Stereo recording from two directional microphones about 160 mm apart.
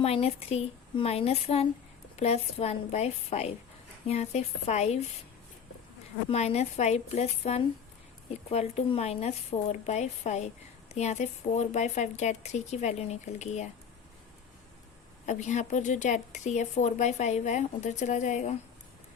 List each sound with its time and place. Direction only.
0.0 s speech: 40° left (ahead or behind)
6.2 s speech: 40° left (ahead or behind)
15.3 s speech: 50° left (ahead or behind)